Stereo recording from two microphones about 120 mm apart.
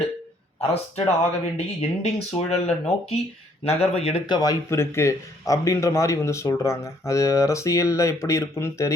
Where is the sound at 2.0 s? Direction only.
65° left (ahead or behind).